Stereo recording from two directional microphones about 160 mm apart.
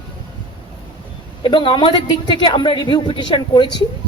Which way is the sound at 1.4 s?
30° left (ahead or behind).